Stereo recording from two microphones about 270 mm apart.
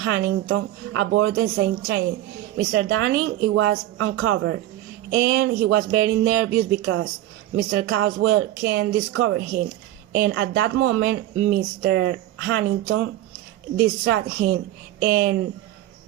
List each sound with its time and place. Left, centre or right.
0.0 s a woman's voice: right